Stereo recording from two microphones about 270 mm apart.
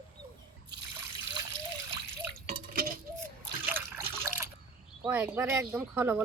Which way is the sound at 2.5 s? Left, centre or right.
Right.